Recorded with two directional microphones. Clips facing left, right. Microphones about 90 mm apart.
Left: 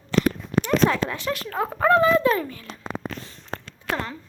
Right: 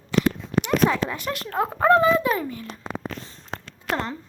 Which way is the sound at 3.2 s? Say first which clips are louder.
Left 1 dB; 30° right (ahead or behind).